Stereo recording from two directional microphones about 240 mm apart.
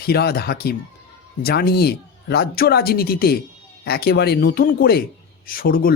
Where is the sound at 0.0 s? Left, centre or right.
Left.